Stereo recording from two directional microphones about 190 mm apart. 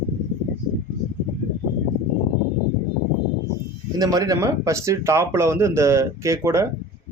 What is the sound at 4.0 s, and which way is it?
Speech, 20° right (ahead or behind).